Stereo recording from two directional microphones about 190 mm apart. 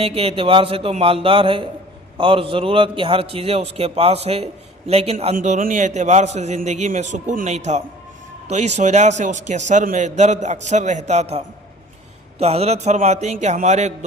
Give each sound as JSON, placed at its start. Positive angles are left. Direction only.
{"t": 0.0, "sound": "a man's voice", "side_deg": -30}